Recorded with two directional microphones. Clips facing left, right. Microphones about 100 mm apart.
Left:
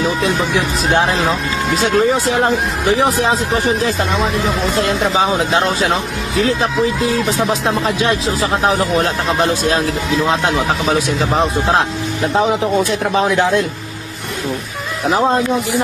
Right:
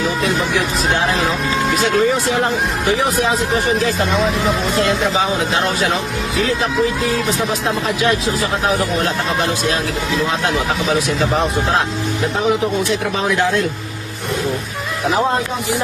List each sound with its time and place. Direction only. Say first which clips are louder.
0.9 s speech: left 5 dB; 30° left (ahead or behind)
4.9 s speech: left 2 dB; 30° left (ahead or behind)
13.1 s speech: left 5 dB; 25° left (ahead or behind)